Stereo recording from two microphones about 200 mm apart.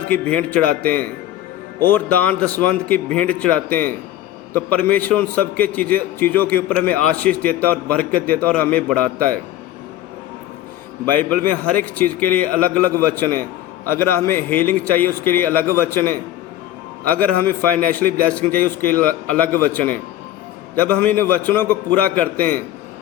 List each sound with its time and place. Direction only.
0.1 s a man's voice: 5° left (ahead or behind)
11.1 s a man's voice: 10° left (ahead or behind)